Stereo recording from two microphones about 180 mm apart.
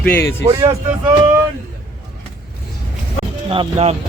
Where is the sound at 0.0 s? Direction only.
10° left (ahead or behind).